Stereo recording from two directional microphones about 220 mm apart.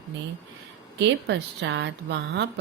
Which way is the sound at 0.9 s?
55° right (ahead or behind).